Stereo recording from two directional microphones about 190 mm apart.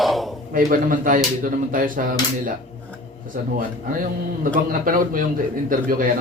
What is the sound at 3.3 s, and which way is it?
Speech, 45° right (ahead or behind).